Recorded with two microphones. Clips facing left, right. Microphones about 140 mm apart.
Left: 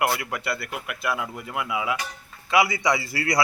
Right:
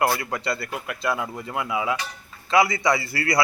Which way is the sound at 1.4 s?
25° right (ahead or behind).